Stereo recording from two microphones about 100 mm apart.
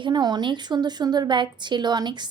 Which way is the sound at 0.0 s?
45° right (ahead or behind).